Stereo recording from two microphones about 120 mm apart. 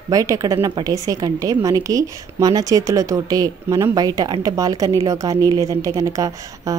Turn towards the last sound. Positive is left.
turn(degrees=-30)  # may be behind; listen again after turning